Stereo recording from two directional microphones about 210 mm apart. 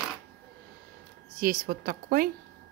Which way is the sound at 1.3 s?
45° right (ahead or behind).